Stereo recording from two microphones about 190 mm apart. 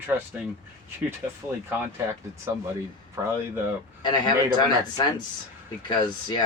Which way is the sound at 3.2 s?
15° right (ahead or behind).